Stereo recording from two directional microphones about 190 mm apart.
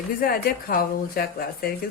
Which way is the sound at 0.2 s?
50° left (ahead or behind).